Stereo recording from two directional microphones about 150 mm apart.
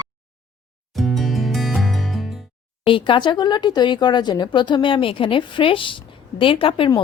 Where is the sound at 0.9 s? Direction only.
Centre (ahead or behind).